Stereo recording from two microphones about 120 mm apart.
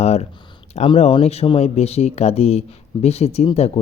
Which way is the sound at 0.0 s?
65° left (ahead or behind).